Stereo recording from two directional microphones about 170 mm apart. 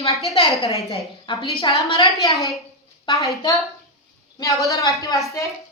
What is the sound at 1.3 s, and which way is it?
Speech, 30° left (ahead or behind).